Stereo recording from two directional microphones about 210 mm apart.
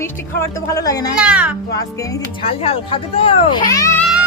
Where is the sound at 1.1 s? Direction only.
5° right (ahead or behind).